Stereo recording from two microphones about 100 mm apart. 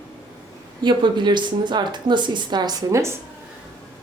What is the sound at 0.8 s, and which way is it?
Speech, 50° right (ahead or behind).